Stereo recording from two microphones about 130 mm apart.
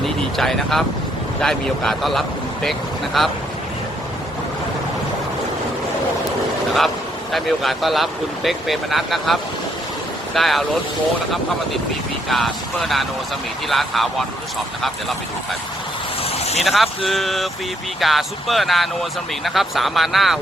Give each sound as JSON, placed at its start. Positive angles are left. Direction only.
{"t": 0.0, "sound": "a sound", "side_deg": 0}
{"t": 1.4, "sound": "speech", "side_deg": 5}
{"t": 7.3, "sound": "speech", "side_deg": 0}
{"t": 12.3, "sound": "speech", "side_deg": 0}
{"t": 16.2, "sound": "vehicle", "side_deg": 55}
{"t": 16.6, "sound": "speech", "side_deg": 0}